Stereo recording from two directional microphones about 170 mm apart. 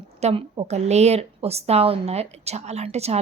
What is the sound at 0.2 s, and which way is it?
Speech, 35° right (ahead or behind).